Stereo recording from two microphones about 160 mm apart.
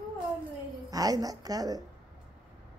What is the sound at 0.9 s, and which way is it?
Speech, 25° right (ahead or behind).